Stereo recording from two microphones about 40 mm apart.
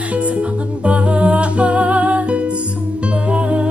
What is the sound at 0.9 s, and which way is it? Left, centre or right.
Music, right.